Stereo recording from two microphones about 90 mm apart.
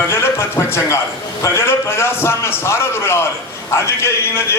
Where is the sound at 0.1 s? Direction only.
30° left (ahead or behind).